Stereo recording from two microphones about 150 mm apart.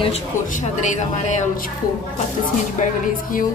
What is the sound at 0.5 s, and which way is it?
A woman's voice, 55° left (ahead or behind).